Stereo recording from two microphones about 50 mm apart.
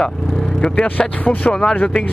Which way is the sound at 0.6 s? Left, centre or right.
Left.